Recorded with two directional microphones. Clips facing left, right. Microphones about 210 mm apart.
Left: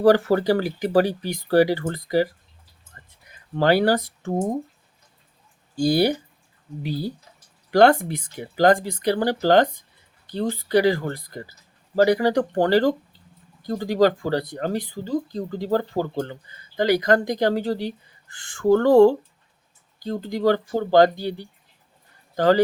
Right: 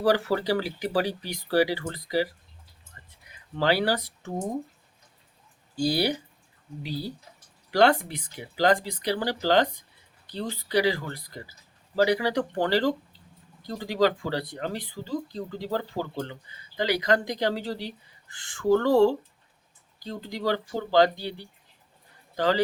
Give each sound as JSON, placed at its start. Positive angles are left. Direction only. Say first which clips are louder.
{"t": 0.0, "sound": "speech", "louder": "left 7 dB", "side_deg": 50}
{"t": 3.0, "sound": "a sound", "louder": "left 3 dB", "side_deg": 45}
{"t": 3.6, "sound": "speech", "louder": "left 6 dB", "side_deg": 50}
{"t": 5.7, "sound": "speech", "louder": "left 6 dB", "side_deg": 50}
{"t": 7.7, "sound": "speech", "louder": "left 5 dB", "side_deg": 50}